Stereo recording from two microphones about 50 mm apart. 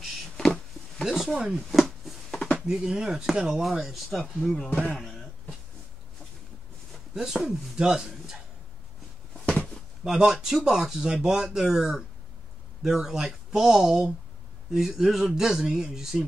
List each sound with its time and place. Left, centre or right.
1.0 s speech: centre
2.3 s a sound: centre
2.6 s speech: centre
7.2 s a man's voice: centre
10.0 s speech: centre